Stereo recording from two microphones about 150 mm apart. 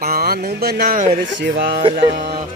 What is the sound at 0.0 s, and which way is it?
Speech, 90° right.